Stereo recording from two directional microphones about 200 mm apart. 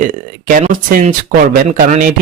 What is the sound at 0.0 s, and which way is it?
Speech, 40° right (ahead or behind).